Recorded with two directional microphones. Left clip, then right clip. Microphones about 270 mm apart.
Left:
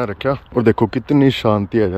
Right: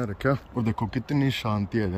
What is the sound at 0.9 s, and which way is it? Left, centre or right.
Speech, centre.